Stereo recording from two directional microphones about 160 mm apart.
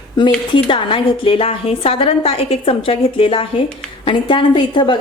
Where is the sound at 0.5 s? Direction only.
30° left (ahead or behind).